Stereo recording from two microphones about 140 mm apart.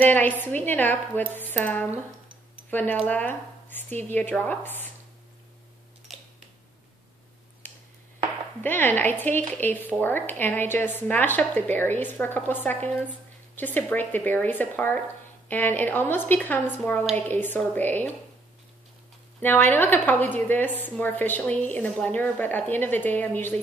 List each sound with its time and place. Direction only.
0.0 s a woman's voice: 10° left (ahead or behind)
8.5 s a woman's voice: 15° left (ahead or behind)
19.4 s a woman's voice: 15° left (ahead or behind)